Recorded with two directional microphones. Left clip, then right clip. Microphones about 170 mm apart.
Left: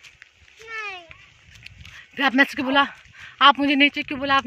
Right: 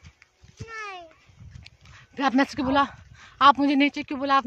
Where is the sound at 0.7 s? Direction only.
10° right (ahead or behind).